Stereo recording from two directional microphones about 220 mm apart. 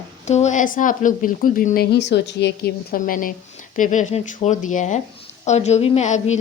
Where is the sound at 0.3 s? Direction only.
30° left (ahead or behind).